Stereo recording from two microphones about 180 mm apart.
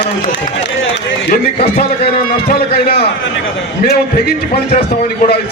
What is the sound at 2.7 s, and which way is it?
Speech, 60° left (ahead or behind).